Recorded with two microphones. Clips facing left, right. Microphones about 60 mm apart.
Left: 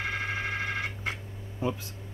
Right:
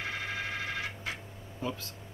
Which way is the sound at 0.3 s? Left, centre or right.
Left.